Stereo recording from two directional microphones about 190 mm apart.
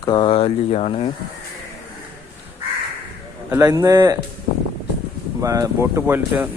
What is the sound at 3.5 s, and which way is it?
Speech, 15° right (ahead or behind).